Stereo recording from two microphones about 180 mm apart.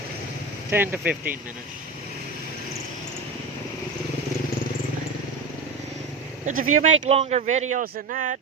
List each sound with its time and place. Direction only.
0.7 s speech: 10° right (ahead or behind)
6.4 s a man's voice: 45° right (ahead or behind)